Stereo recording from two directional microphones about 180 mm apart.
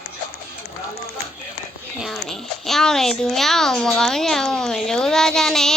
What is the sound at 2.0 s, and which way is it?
Speech, centre (ahead or behind).